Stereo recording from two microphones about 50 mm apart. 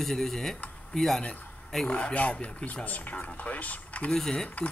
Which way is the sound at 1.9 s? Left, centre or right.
Left.